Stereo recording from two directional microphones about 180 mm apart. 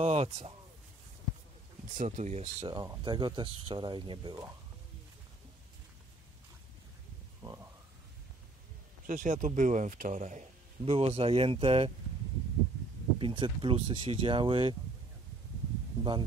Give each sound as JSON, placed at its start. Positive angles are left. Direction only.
{"t": 0.0, "sound": "a man's voice", "side_deg": -35}
{"t": 2.0, "sound": "a man's voice", "side_deg": -45}
{"t": 2.7, "sound": "speech", "side_deg": -25}
{"t": 7.4, "sound": "a sound", "side_deg": -15}
{"t": 9.0, "sound": "a man's voice", "side_deg": -45}
{"t": 13.2, "sound": "speech", "side_deg": -30}
{"t": 16.0, "sound": "speech", "side_deg": -25}